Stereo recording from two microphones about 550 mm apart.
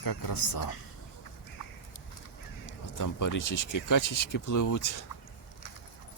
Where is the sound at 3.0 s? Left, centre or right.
Left.